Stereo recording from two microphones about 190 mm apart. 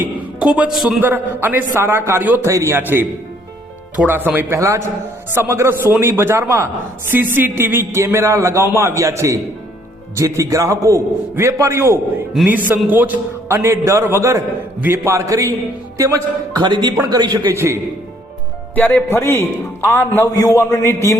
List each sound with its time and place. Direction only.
0.0 s a man's voice: 5° right (ahead or behind)
16.6 s a man's voice: 20° right (ahead or behind)
18.7 s a man's voice: 10° left (ahead or behind)